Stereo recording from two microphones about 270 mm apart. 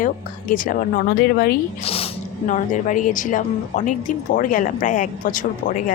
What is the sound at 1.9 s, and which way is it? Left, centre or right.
Speech, left.